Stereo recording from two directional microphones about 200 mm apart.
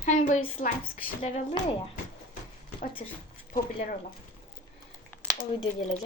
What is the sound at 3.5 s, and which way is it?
Speech, 45° left (ahead or behind).